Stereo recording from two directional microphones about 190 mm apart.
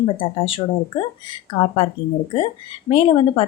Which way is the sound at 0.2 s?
25° left (ahead or behind).